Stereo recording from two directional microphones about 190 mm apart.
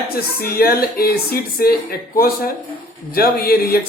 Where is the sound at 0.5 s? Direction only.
55° left (ahead or behind).